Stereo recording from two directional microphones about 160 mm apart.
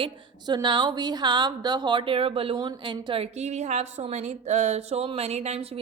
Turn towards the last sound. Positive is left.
turn(degrees=-40)  # may be behind; listen again after turning